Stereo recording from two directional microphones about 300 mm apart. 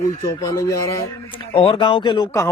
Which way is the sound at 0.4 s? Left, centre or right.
Centre.